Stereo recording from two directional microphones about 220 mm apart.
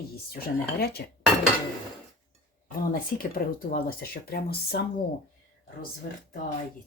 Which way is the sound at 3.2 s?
40° left (ahead or behind).